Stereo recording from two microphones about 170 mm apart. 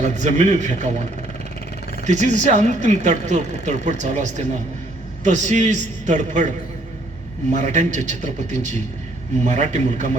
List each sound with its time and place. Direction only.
0.0 s speech: 45° right (ahead or behind)
2.0 s speech: 45° right (ahead or behind)
7.5 s speech: 45° right (ahead or behind)